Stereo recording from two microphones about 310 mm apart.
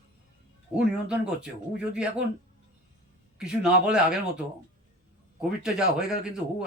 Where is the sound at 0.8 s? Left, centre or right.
Centre.